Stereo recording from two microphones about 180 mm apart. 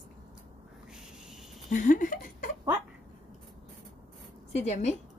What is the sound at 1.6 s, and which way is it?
Speech, 45° left (ahead or behind).